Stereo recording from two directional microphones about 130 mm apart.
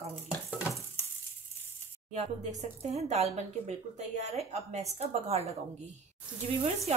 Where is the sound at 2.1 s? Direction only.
60° right (ahead or behind).